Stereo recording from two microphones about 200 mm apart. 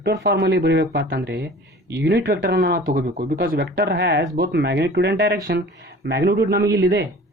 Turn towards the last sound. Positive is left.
turn(degrees=-55)  # may be behind; listen again after turning